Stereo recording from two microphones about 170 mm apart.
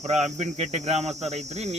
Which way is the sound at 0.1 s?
40° right (ahead or behind).